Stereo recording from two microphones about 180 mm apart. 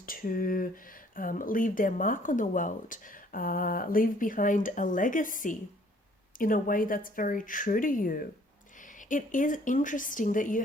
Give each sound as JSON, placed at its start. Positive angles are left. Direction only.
{"t": 0.0, "sound": "speech", "side_deg": 50}